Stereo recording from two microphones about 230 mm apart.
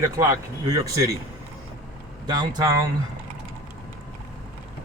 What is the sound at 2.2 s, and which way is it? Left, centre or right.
Speech, centre.